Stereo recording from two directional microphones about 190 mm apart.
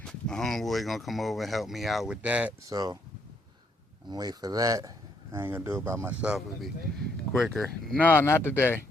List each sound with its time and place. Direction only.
0.0 s speech: 5° left (ahead or behind)
2.7 s speech: 20° right (ahead or behind)
4.1 s speech: 20° right (ahead or behind); by 8.8 s 10° left (ahead or behind)